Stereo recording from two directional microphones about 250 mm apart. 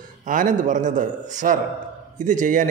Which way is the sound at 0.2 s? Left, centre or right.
Right.